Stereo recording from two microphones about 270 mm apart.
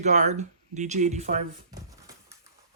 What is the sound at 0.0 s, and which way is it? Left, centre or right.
Speech, right.